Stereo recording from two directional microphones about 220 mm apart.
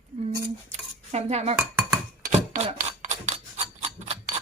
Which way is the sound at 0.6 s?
30° right (ahead or behind).